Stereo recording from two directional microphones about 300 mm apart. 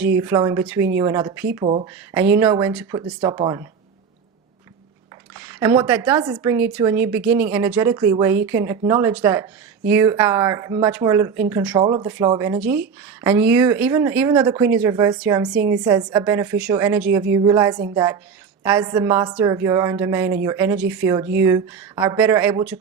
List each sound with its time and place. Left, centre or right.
0.2 s speech: centre
1.9 s speech: centre
5.3 s speech: centre